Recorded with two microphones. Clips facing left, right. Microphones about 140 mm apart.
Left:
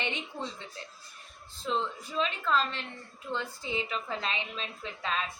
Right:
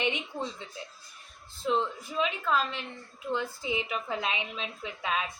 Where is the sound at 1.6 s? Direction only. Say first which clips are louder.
Right 3 dB; 10° right (ahead or behind).